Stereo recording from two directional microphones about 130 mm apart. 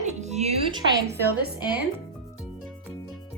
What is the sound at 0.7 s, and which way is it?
Speech, 30° right (ahead or behind).